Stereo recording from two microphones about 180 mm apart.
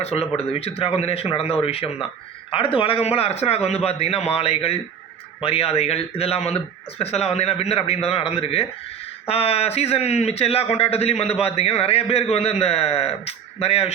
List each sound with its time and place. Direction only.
0.0 s a man's voice: 35° left (ahead or behind)